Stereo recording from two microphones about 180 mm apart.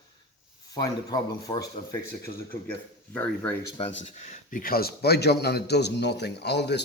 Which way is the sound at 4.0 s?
45° left (ahead or behind).